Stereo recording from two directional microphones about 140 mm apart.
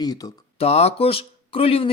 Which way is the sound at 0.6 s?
45° left (ahead or behind).